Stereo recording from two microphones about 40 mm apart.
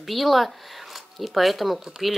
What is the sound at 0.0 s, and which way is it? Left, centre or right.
A woman's voice, centre.